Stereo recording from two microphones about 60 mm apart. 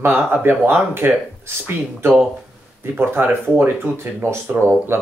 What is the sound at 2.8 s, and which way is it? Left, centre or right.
Speech, right.